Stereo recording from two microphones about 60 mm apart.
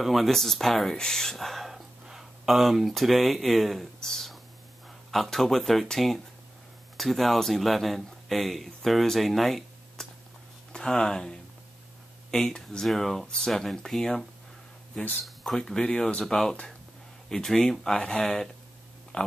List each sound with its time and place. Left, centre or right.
0.0 s speech: centre
10.7 s speech: centre
15.2 s speech: centre
19.1 s speech: centre